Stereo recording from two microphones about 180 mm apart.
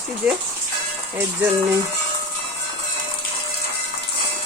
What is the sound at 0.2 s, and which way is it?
Speech, 5° right (ahead or behind).